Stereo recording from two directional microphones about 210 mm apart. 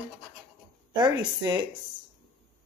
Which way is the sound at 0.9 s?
20° right (ahead or behind).